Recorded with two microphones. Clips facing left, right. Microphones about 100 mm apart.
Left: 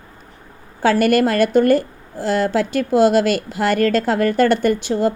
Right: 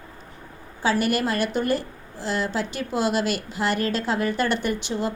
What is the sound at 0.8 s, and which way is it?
A woman's voice, 55° left (ahead or behind).